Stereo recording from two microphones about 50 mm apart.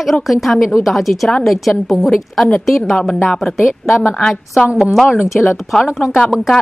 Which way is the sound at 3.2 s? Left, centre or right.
Centre.